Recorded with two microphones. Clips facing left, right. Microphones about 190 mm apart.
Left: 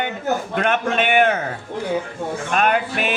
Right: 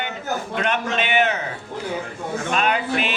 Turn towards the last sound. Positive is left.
turn(degrees=50)  # may be behind; listen again after turning